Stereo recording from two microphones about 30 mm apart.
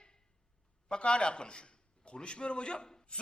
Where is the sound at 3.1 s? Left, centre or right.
Left.